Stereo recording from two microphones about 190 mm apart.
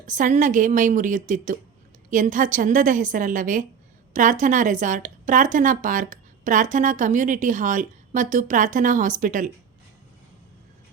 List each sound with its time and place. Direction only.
0.0 s a woman's voice: 40° right (ahead or behind)